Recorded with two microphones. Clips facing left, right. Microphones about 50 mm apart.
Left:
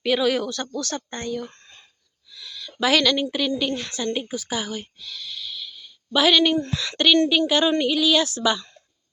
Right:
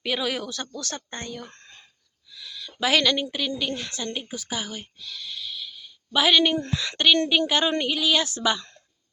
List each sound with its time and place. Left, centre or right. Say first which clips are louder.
0.0 s a woman's voice: left 6 dB; centre
1.4 s speech: left 7 dB; right
2.3 s a sound: left 1 dB; centre
3.2 s a woman's voice: left 4 dB; centre
5.1 s a sound: left 1 dB; centre
6.7 s speech: even; centre
7.2 s speech: left 3 dB; right